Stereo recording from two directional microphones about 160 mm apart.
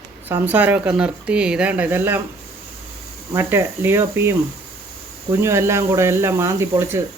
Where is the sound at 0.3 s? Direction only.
10° right (ahead or behind).